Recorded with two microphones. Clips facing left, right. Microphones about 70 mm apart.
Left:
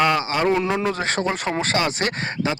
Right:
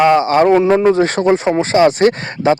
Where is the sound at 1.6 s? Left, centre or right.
Right.